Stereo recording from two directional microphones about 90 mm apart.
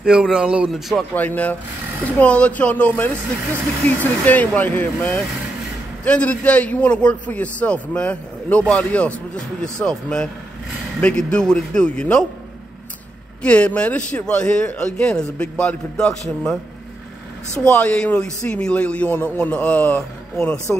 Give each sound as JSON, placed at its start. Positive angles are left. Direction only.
{"t": 0.0, "sound": "speech", "side_deg": -10}
{"t": 1.1, "sound": "a man's voice", "side_deg": 15}
{"t": 13.4, "sound": "a man's voice", "side_deg": 15}
{"t": 17.6, "sound": "a man's voice", "side_deg": 15}